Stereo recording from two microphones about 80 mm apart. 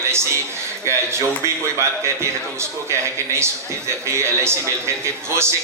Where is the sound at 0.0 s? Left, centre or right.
Right.